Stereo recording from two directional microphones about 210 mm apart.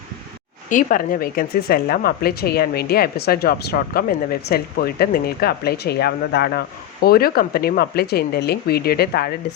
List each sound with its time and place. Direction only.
0.7 s speech: 40° left (ahead or behind)